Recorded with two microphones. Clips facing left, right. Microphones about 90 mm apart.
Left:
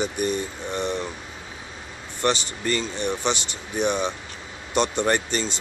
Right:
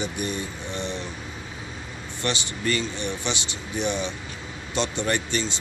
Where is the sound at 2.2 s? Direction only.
35° left (ahead or behind).